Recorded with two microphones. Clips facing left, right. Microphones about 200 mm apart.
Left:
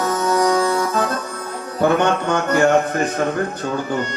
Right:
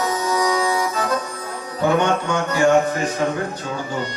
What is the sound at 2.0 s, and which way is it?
Music, 60° left (ahead or behind).